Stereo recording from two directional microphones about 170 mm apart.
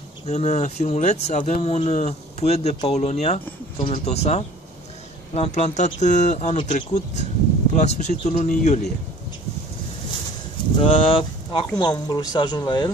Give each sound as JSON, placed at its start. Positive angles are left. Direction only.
{"t": 0.3, "sound": "speech", "side_deg": 40}
{"t": 10.8, "sound": "speech", "side_deg": 35}